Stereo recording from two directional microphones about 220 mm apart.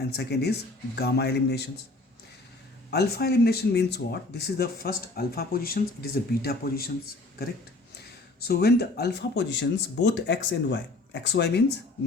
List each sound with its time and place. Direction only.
0.0 s speech: 45° left (ahead or behind)
2.9 s speech: 45° left (ahead or behind)
8.4 s speech: 45° left (ahead or behind)